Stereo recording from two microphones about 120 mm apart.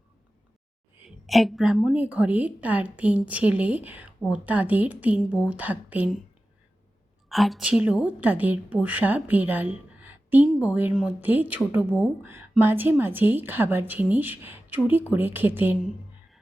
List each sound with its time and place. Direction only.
1.0 s speech: centre (ahead or behind)
7.3 s speech: centre (ahead or behind); by 15.8 s 15° right (ahead or behind)